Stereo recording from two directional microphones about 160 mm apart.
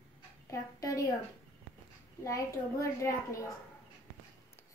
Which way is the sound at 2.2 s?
20° left (ahead or behind).